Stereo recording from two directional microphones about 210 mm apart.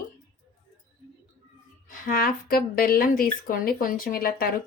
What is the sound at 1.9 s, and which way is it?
A woman's voice, 40° left (ahead or behind).